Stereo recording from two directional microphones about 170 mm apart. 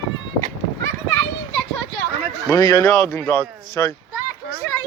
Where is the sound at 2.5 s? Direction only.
20° left (ahead or behind).